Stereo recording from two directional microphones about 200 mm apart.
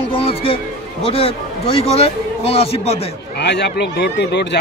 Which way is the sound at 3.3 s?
60° left (ahead or behind).